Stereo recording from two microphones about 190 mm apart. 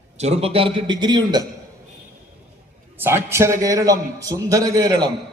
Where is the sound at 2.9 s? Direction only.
10° right (ahead or behind).